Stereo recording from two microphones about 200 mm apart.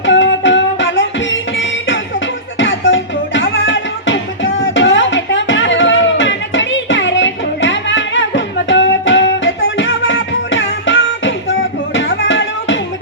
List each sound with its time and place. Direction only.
0.0 s music: 65° left (ahead or behind)